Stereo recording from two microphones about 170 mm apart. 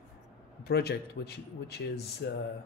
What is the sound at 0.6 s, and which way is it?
Speech, 70° left (ahead or behind).